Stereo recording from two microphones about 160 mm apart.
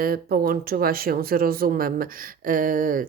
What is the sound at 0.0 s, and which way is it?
Speech, 70° right (ahead or behind).